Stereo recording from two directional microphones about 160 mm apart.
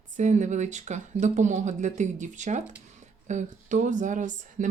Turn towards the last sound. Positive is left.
turn(degrees=-50)  # may be behind; listen again after turning